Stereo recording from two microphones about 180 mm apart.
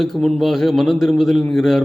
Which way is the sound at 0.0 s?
Centre (ahead or behind).